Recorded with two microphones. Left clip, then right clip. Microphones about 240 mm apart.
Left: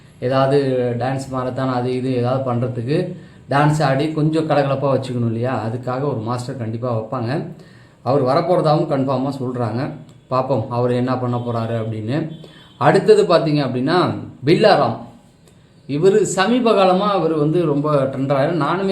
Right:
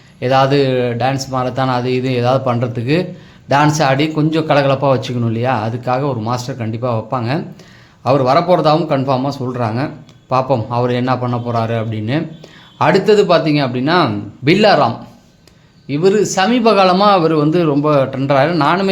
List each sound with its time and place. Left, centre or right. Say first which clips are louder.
0.2 s a man's voice: right 4 dB; right
15.9 s a man's voice: right 1 dB; right